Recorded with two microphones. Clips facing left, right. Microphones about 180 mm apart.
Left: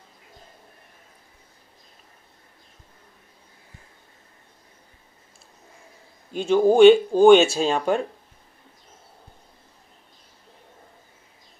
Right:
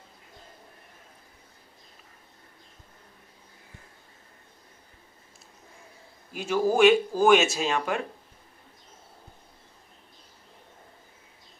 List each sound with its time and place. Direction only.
6.3 s speech: 25° left (ahead or behind)